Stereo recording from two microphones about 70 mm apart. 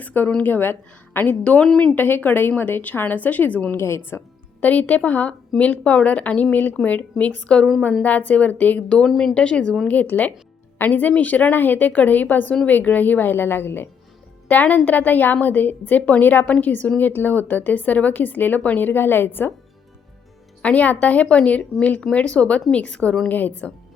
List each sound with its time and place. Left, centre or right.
0.0 s speech: left
1.2 s a woman's voice: centre
2.0 s speech: left
3.8 s a woman's voice: left
4.6 s speech: left
9.0 s a woman's voice: centre
9.3 s a woman's voice: centre; by 19.5 s left
20.6 s a woman's voice: left